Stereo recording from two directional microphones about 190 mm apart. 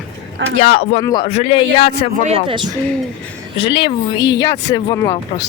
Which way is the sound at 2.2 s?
30° right (ahead or behind).